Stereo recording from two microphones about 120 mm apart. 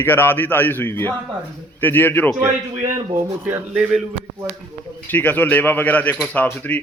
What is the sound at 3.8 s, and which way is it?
Speech, 10° right (ahead or behind).